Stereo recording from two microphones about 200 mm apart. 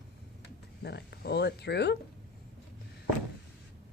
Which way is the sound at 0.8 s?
55° left (ahead or behind).